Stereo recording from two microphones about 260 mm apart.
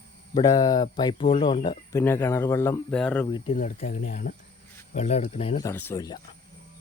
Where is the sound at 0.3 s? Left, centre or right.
Centre.